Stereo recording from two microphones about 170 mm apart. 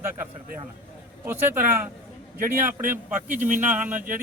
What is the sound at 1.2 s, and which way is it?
Speech, 10° right (ahead or behind).